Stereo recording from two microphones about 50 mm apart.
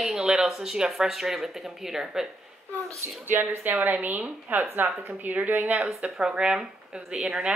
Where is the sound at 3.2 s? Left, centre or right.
Right.